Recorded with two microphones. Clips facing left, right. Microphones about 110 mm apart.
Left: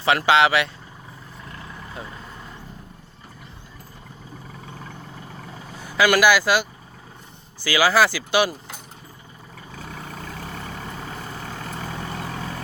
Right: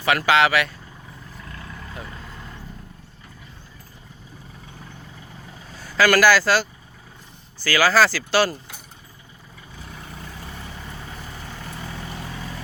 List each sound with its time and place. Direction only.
0.0 s speech: 25° left (ahead or behind)
1.9 s vehicle: 20° left (ahead or behind)
5.7 s speech: 20° left (ahead or behind)
9.7 s vehicle: 60° left (ahead or behind)